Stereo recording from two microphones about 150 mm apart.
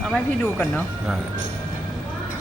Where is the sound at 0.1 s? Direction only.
Centre (ahead or behind).